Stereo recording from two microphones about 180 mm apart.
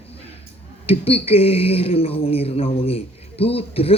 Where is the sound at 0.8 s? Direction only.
35° left (ahead or behind).